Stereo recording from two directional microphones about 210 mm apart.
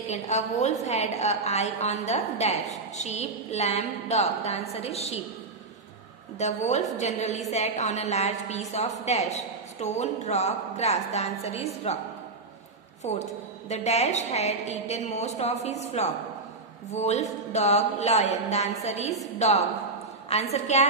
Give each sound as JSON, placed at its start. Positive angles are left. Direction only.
{"t": 0.1, "sound": "a woman's voice", "side_deg": 35}
{"t": 6.3, "sound": "a woman's voice", "side_deg": 35}
{"t": 13.0, "sound": "a woman's voice", "side_deg": 30}